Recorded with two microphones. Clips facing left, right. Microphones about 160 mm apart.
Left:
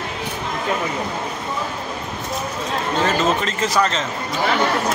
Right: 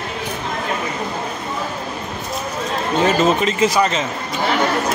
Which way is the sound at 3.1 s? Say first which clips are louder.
Right 6 dB; 15° right (ahead or behind).